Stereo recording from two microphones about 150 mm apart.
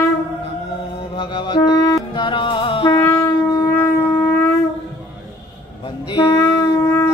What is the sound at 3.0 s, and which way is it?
Shofar, 20° left (ahead or behind).